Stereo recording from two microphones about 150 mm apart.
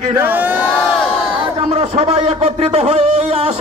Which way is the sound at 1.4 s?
40° right (ahead or behind).